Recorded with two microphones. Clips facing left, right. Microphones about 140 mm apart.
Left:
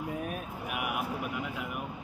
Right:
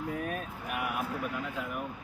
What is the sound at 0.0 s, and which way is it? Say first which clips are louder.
Vehicle: right 1 dB; 10° left (ahead or behind).